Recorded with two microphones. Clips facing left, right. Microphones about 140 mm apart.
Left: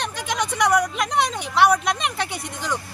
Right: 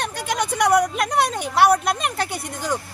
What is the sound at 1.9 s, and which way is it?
Speech, 45° right (ahead or behind).